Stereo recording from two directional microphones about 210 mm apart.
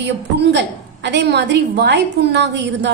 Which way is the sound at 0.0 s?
55° right (ahead or behind).